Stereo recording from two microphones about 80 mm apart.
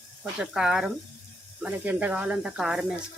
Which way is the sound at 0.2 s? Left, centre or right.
Centre.